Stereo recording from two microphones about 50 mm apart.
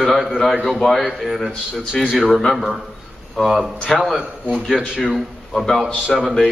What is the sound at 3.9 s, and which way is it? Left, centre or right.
A man's voice, centre.